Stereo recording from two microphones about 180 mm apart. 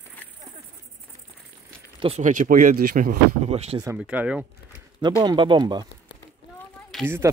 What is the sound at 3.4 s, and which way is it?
Speech, 35° right (ahead or behind).